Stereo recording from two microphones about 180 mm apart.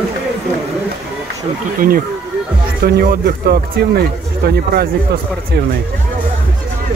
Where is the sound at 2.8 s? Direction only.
60° right (ahead or behind).